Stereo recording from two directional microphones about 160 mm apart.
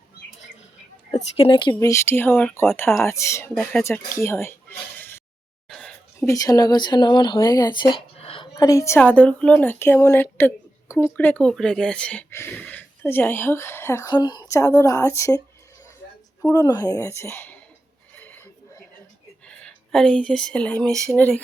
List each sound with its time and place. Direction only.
1.1 s speech: 35° left (ahead or behind)
1.9 s a woman's voice: 15° left (ahead or behind)
3.6 s speech: 10° left (ahead or behind)
5.6 s a sound: centre (ahead or behind)
6.1 s speech: 20° left (ahead or behind)
8.5 s a woman's voice: 20° left (ahead or behind)
16.4 s a woman's voice: 20° left (ahead or behind)
18.2 s a sound: 10° left (ahead or behind)
19.5 s a woman's voice: 5° left (ahead or behind)